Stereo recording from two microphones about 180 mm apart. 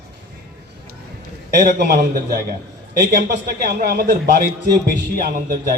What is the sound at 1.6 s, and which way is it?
A man's voice, 55° right (ahead or behind).